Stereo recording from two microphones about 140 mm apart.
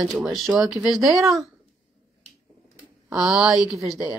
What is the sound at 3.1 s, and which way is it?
Speech, 20° right (ahead or behind).